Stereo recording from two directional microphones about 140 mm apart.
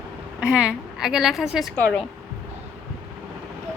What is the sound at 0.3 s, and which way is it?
A woman's voice, 5° right (ahead or behind).